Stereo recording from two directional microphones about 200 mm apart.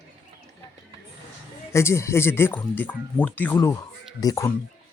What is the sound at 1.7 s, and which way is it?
Speech, 15° left (ahead or behind).